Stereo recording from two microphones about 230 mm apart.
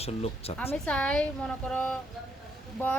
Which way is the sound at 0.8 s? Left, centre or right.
Centre.